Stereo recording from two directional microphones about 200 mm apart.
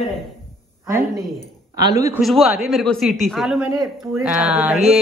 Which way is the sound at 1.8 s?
15° right (ahead or behind).